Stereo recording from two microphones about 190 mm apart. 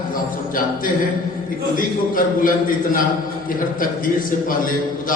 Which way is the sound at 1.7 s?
45° left (ahead or behind).